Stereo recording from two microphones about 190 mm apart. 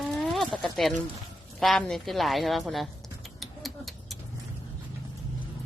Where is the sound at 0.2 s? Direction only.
5° left (ahead or behind).